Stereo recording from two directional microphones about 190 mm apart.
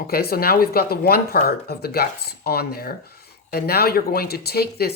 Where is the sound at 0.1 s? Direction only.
55° left (ahead or behind).